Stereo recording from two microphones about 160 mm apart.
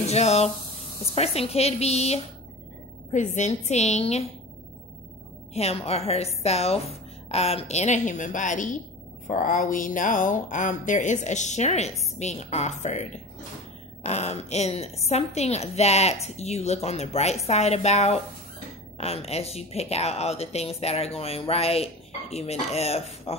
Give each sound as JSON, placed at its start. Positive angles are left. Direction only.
{"t": 0.0, "sound": "a woman's voice", "side_deg": 45}
{"t": 5.5, "sound": "a woman's voice", "side_deg": 40}